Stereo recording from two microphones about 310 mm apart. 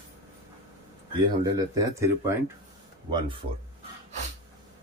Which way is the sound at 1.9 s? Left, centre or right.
Centre.